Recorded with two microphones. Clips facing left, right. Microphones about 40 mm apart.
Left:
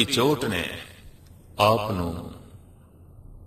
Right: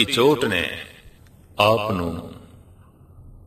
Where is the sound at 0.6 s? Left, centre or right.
Right.